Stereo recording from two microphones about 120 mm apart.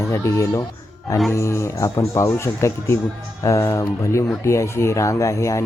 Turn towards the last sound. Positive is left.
turn(degrees=25)  # may be behind; listen again after turning